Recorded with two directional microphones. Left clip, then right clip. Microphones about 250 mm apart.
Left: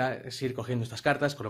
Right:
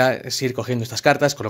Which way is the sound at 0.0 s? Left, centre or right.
Right.